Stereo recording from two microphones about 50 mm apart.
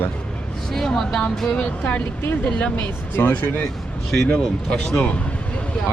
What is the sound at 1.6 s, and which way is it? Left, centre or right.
Speech, left.